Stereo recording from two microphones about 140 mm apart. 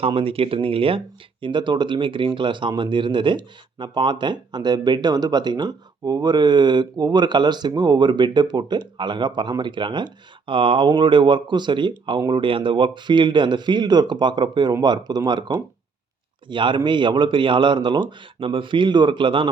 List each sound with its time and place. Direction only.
0.0 s speech: 40° right (ahead or behind)